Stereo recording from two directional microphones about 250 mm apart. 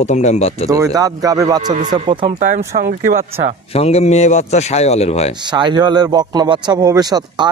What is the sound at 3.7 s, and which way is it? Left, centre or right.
A man's voice, left.